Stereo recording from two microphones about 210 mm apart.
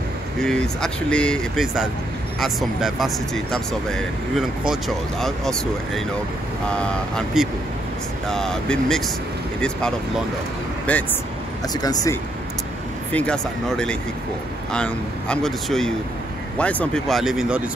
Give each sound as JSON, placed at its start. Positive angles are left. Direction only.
{"t": 0.4, "sound": "speech", "side_deg": 5}
{"t": 11.7, "sound": "speech", "side_deg": 20}
{"t": 13.1, "sound": "speech", "side_deg": 5}